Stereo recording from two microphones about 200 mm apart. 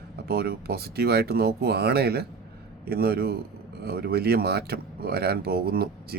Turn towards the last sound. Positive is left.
turn(degrees=-50)  # may be behind; listen again after turning